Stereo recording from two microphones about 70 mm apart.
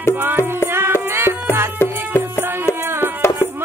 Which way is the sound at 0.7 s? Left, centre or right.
Right.